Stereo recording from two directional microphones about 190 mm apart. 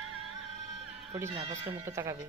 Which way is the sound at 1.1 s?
20° right (ahead or behind).